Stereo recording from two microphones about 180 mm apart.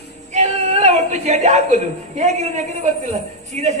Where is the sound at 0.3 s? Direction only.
40° right (ahead or behind).